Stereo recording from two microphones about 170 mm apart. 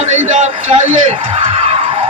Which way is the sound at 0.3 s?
40° right (ahead or behind).